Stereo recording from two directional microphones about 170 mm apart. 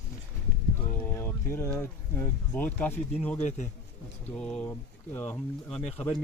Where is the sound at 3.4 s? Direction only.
45° left (ahead or behind).